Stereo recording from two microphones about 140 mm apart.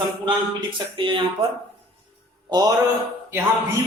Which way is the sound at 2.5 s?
30° right (ahead or behind).